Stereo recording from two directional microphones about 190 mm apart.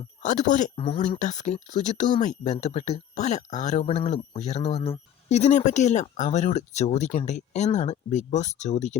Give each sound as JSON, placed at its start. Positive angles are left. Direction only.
{"t": 0.2, "sound": "speech", "side_deg": 40}
{"t": 0.8, "sound": "speech", "side_deg": 25}
{"t": 1.2, "sound": "speech", "side_deg": 40}